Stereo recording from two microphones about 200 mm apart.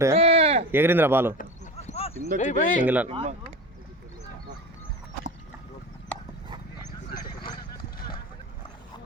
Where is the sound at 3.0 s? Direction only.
35° right (ahead or behind).